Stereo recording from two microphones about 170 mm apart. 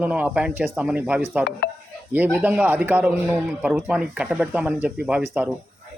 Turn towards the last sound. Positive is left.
turn(degrees=-5)  # may be behind; listen again after turning